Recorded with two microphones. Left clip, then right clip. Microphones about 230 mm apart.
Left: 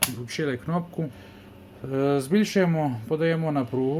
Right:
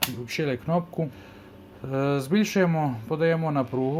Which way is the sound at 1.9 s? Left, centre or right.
Centre.